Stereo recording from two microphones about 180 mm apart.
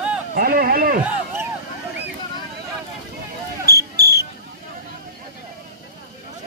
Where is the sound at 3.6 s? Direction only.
65° right (ahead or behind).